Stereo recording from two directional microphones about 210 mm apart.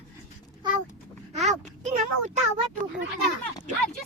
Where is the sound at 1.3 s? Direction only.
30° right (ahead or behind).